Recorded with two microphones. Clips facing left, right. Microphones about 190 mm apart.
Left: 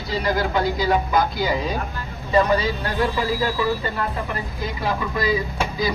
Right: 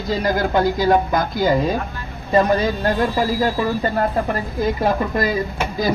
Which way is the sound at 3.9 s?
45° right (ahead or behind).